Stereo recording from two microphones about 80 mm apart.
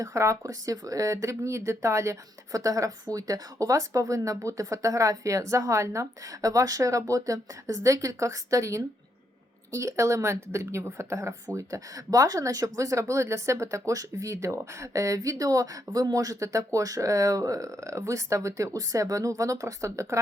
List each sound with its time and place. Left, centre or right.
0.0 s a woman's voice: right